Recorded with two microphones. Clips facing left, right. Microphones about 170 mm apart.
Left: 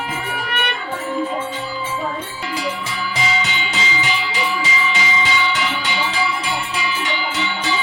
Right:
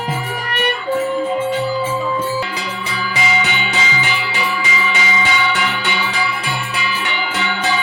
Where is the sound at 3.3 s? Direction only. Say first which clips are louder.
Right 3 dB; 65° right (ahead or behind).